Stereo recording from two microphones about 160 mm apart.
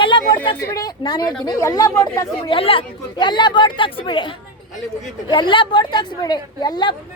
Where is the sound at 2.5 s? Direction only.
35° left (ahead or behind).